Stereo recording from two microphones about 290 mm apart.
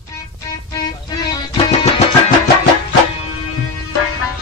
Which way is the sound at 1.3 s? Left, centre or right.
Centre.